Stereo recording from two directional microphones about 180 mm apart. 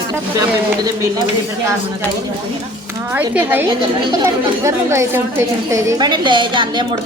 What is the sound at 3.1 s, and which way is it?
A woman's voice, 10° right (ahead or behind).